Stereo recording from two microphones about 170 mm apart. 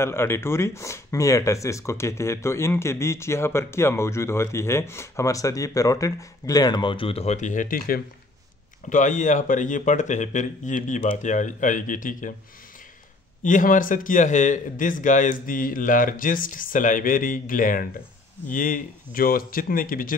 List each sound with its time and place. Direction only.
0.0 s a man's voice: 15° left (ahead or behind); by 12.4 s 50° left (ahead or behind)
13.4 s a man's voice: 50° left (ahead or behind)